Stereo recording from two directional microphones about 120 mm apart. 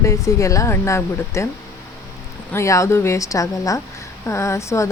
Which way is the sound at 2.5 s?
25° left (ahead or behind).